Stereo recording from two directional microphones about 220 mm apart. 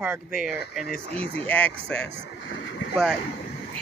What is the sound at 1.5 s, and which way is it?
Speech, 5° left (ahead or behind).